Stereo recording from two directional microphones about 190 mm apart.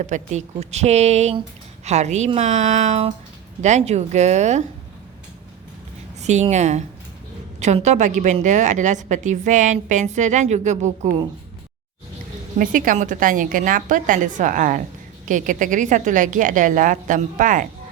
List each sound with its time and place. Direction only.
0.0 s a woman's voice: 40° right (ahead or behind)
6.2 s a woman's voice: 35° right (ahead or behind)
12.5 s a woman's voice: 45° right (ahead or behind)